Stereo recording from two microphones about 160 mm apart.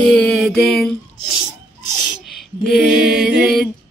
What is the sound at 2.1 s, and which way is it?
Female singing, centre (ahead or behind).